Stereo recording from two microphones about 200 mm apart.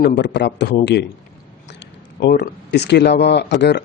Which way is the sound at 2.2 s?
55° left (ahead or behind).